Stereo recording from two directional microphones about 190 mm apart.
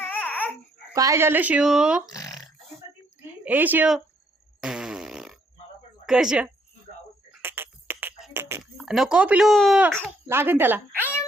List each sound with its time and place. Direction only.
0.1 s babbling: 10° left (ahead or behind)
0.9 s speech: 15° right (ahead or behind)
2.0 s speech: 20° left (ahead or behind)
3.4 s speech: 10° right (ahead or behind)
4.6 s fart: 5° right (ahead or behind)
6.1 s speech: 5° right (ahead or behind)
7.4 s a sound: 10° right (ahead or behind)
8.8 s speech: 5° right (ahead or behind)
10.2 s speech: 10° right (ahead or behind)